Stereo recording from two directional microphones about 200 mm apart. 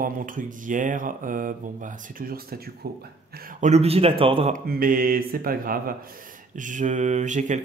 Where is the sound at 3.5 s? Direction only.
35° right (ahead or behind).